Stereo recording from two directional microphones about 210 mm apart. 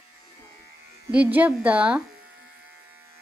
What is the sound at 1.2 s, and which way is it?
Speech, 10° right (ahead or behind).